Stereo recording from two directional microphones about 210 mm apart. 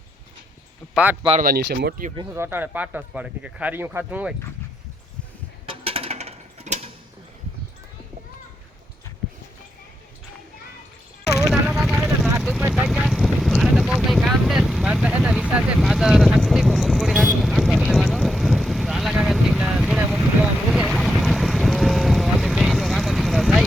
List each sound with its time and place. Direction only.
1.4 s speech: 45° right (ahead or behind)
2.1 s speech: 10° right (ahead or behind)
5.6 s a sound: 30° right (ahead or behind)
11.4 s vehicle: centre (ahead or behind)
20.7 s boat: centre (ahead or behind)